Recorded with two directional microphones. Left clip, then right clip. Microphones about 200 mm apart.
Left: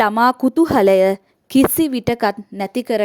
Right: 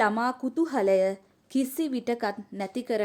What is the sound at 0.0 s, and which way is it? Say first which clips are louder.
A woman's voice: left 11 dB; 50° left (ahead or behind).